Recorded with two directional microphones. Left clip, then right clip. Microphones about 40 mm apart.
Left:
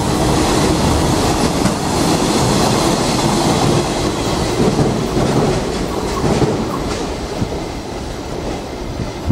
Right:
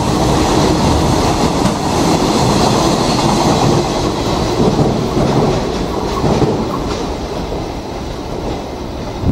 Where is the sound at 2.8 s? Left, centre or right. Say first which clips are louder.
Right 2 dB; centre.